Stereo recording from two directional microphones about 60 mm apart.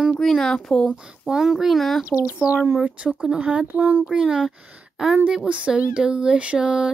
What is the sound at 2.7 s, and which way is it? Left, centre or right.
Speech, centre.